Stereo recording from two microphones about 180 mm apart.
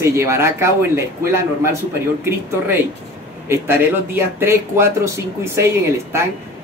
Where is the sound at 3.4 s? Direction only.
15° right (ahead or behind).